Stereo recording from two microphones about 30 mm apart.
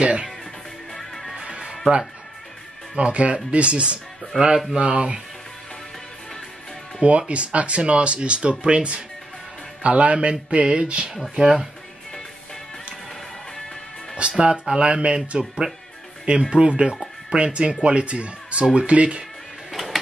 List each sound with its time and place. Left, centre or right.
0.0 s music: right
0.9 s music: centre
3.0 s speech: right
4.3 s speech: centre
4.7 s speech: right
7.0 s speech: right
11.2 s speech: right
14.4 s speech: right
15.6 s speech: right
16.3 s speech: right
19.7 s printer: centre